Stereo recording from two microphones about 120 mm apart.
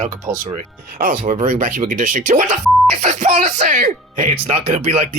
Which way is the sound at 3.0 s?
75° right (ahead or behind).